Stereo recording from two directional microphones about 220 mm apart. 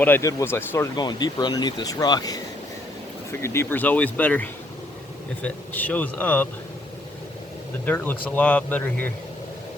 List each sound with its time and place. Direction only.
0.0 s speech: 10° left (ahead or behind)
7.9 s speech: 10° left (ahead or behind)